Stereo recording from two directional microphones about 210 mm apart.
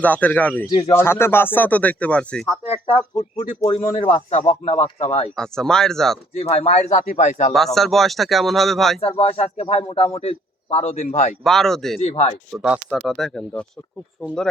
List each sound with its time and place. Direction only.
0.0 s speech: 5° left (ahead or behind)
3.3 s speech: 30° left (ahead or behind)
5.4 s speech: 5° left (ahead or behind)
6.3 s speech: 30° left (ahead or behind)
7.5 s speech: centre (ahead or behind)
9.0 s a man's voice: 25° left (ahead or behind)
11.4 s speech: centre (ahead or behind)
11.9 s a man's voice: 30° left (ahead or behind)
12.5 s speech: 5° right (ahead or behind)